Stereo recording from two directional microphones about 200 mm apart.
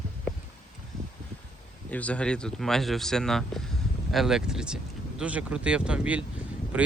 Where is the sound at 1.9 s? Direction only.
5° left (ahead or behind).